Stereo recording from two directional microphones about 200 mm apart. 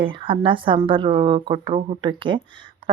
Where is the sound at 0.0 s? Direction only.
25° right (ahead or behind).